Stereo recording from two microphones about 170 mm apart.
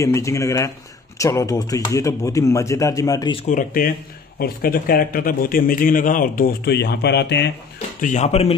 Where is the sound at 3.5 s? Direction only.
55° left (ahead or behind); by 7.5 s 80° left.